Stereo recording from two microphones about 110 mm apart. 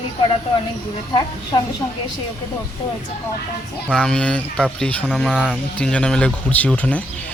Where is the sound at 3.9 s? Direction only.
10° left (ahead or behind).